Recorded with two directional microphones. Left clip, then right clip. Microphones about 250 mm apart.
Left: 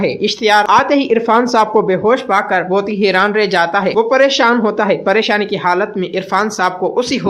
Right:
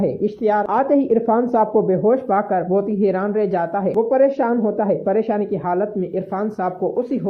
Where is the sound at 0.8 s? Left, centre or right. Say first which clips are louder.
Left 4 dB; centre.